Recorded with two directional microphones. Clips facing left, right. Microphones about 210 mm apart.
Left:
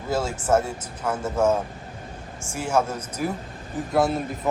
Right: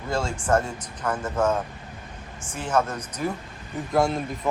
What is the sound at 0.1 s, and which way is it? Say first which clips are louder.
Speech: left 2 dB; 5° left (ahead or behind).